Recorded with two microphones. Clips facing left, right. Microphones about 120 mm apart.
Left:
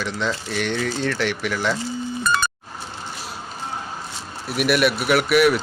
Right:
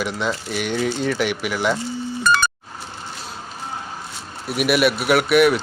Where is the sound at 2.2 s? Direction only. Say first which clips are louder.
Right 4 dB; 85° right.